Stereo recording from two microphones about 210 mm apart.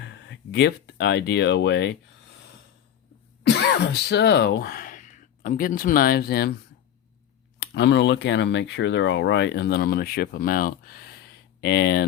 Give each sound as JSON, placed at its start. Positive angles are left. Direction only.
{"t": 0.0, "sound": "speech", "side_deg": 55}
{"t": 3.4, "sound": "speech", "side_deg": 55}
{"t": 7.6, "sound": "speech", "side_deg": 55}